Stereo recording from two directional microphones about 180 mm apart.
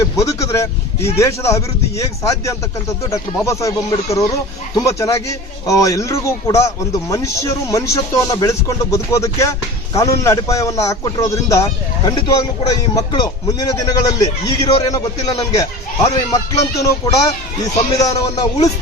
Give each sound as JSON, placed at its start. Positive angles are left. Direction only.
{"t": 0.0, "sound": "speech", "side_deg": 20}
{"t": 4.7, "sound": "a man's voice", "side_deg": 20}